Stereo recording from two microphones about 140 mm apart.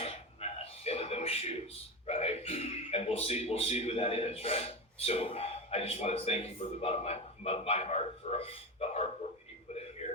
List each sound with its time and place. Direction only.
0.0 s throat clearing: 45° left (ahead or behind)
2.0 s a man's voice: 45° left (ahead or behind)
9.7 s a sound: 45° left (ahead or behind)